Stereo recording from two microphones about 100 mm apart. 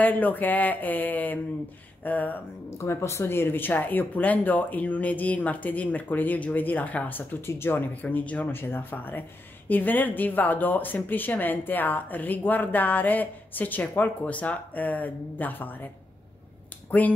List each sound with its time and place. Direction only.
0.0 s speech: 15° left (ahead or behind)